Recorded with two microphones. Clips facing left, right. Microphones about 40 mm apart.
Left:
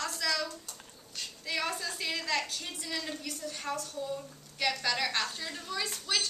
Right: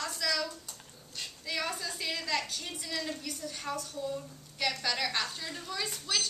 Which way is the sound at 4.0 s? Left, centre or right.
Centre.